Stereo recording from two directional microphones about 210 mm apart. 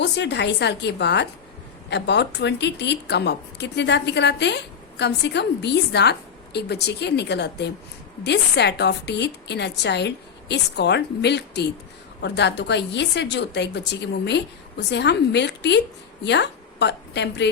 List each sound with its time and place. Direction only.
0.0 s a woman's voice: 55° left (ahead or behind)